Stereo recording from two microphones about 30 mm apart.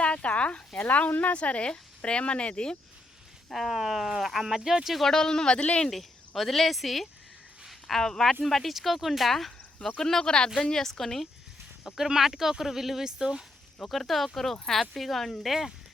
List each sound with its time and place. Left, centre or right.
0.0 s a sound: left
0.8 s speech: left
3.5 s speech: centre
3.8 s speech: centre
5.0 s speech: centre
5.9 s speech: centre
7.9 s speech: centre
8.4 s speech: centre
10.0 s speech: centre
10.8 s speech: centre
11.9 s speech: centre
13.1 s speech: right
13.8 s speech: centre
15.4 s speech: centre